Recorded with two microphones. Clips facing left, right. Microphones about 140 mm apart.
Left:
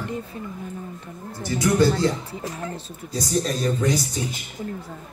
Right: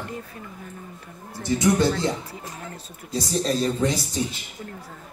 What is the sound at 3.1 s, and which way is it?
Speech, 25° right (ahead or behind).